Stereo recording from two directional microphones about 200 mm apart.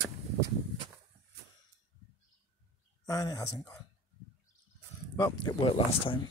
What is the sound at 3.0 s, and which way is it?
Speech, 15° left (ahead or behind).